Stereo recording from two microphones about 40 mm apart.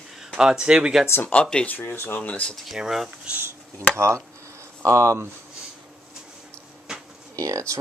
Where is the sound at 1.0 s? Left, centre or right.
Left.